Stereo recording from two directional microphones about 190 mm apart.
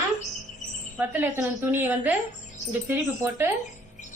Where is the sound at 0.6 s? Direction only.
40° left (ahead or behind).